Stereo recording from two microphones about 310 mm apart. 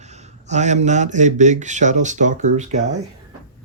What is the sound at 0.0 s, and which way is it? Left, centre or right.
A man's voice, right.